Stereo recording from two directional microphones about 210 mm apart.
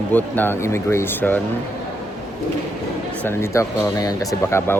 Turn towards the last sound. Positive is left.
turn(degrees=10)  # may be behind; listen again after turning